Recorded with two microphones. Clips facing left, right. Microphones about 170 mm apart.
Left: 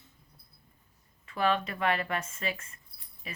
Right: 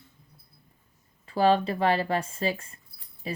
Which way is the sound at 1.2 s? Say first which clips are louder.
Right 7 dB; 35° right (ahead or behind).